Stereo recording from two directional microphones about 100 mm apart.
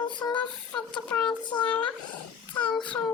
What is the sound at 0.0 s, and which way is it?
Female singing, 50° left (ahead or behind).